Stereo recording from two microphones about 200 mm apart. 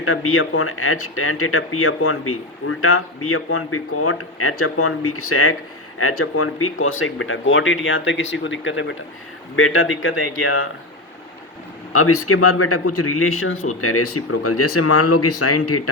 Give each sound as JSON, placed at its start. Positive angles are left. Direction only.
{"t": 0.0, "sound": "speech", "side_deg": 90}
{"t": 9.6, "sound": "speech", "side_deg": 90}
{"t": 11.9, "sound": "speech", "side_deg": 90}